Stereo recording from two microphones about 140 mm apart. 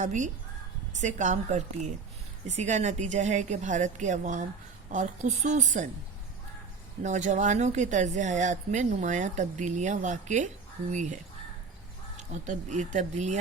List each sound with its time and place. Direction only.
0.0 s speech: 60° right (ahead or behind)
7.0 s speech: 60° right (ahead or behind)
12.1 s speech: 60° right (ahead or behind)